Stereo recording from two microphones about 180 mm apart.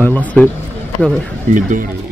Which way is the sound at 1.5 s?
45° right (ahead or behind).